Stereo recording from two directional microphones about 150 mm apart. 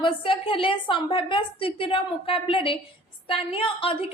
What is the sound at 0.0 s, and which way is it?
A woman's voice, 35° left (ahead or behind).